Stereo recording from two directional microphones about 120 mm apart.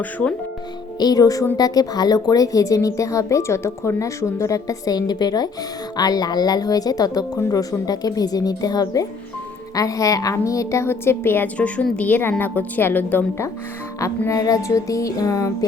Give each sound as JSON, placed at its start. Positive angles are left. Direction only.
{"t": 0.0, "sound": "speech", "side_deg": 10}
{"t": 0.9, "sound": "a woman's voice", "side_deg": 35}
{"t": 14.3, "sound": "a woman's voice", "side_deg": 30}